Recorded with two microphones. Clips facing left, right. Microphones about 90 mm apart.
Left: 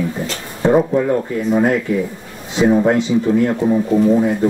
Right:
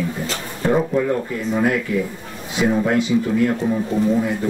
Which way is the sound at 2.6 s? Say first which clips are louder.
Left 5 dB; 25° left (ahead or behind).